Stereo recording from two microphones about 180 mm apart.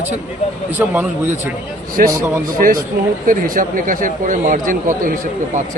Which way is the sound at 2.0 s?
55° right (ahead or behind).